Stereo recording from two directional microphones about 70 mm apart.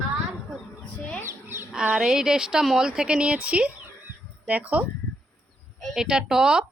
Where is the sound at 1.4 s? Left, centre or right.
Right.